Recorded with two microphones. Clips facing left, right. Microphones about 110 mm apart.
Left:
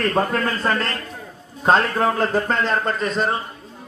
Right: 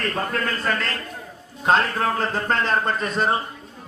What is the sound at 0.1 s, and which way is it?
A man's voice, 30° left (ahead or behind).